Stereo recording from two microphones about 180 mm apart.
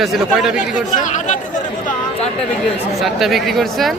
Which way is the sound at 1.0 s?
45° left (ahead or behind).